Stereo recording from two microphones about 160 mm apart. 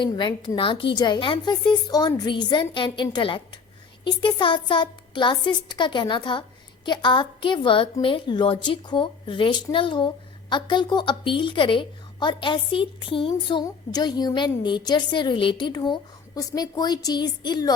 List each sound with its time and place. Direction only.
0.0 s a woman's voice: 30° left (ahead or behind)